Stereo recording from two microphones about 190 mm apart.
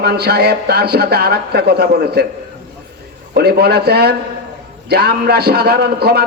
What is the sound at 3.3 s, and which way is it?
Speech, 55° right (ahead or behind).